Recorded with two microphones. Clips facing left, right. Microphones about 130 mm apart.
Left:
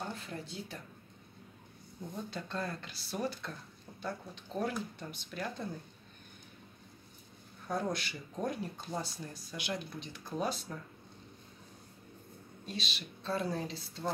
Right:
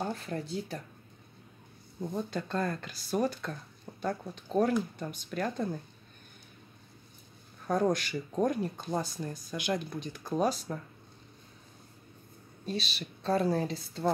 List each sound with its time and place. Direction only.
0.1 s a woman's voice: 40° right (ahead or behind)
2.3 s speech: 50° right (ahead or behind)
7.6 s speech: 50° right (ahead or behind)
12.6 s a woman's voice: 40° right (ahead or behind)
13.5 s a woman's voice: 55° right (ahead or behind)